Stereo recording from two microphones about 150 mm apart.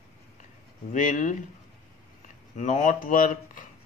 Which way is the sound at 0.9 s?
60° left (ahead or behind).